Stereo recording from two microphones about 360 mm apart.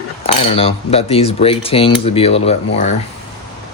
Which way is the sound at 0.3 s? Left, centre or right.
Centre.